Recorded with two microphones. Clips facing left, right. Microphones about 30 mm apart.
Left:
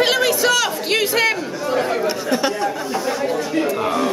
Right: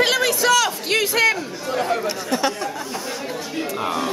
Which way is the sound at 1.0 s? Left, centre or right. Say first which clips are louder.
Right 1 dB; left.